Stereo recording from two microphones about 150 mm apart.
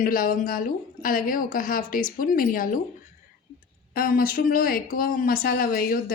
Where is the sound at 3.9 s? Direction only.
75° left (ahead or behind).